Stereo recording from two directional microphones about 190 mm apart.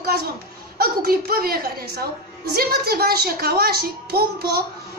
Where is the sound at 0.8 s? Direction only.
50° right (ahead or behind).